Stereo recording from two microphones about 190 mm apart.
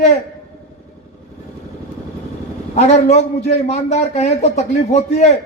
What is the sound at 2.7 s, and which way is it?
A man's voice, 35° left (ahead or behind).